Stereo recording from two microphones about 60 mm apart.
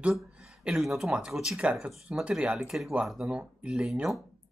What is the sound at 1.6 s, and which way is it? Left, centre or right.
Speech, right.